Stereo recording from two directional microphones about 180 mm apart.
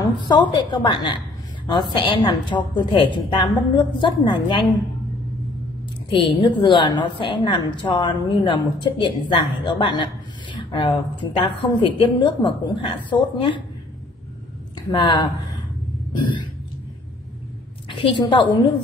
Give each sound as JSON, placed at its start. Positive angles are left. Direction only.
{"t": 0.0, "sound": "a woman's voice", "side_deg": 25}
{"t": 6.0, "sound": "a woman's voice", "side_deg": 25}
{"t": 14.9, "sound": "a woman's voice", "side_deg": 25}
{"t": 16.1, "sound": "a sound", "side_deg": 25}
{"t": 17.8, "sound": "a woman's voice", "side_deg": 30}